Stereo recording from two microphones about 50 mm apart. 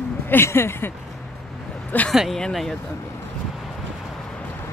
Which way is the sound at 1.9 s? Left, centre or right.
Left.